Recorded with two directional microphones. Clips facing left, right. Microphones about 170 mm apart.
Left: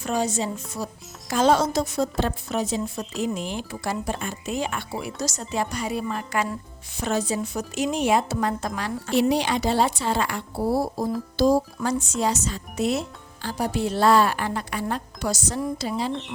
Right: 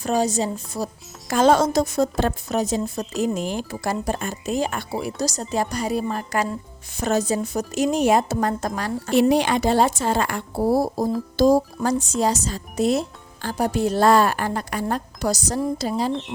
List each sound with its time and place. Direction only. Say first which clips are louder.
0.0 s a woman's voice: right 4 dB; 35° right (ahead or behind)
1.3 s a woman's voice: right 3 dB; 50° right (ahead or behind)